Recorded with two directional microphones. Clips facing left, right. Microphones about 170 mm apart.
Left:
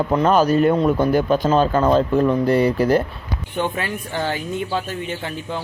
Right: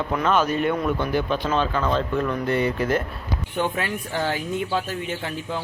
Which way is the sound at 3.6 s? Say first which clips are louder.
Left 2 dB; centre (ahead or behind).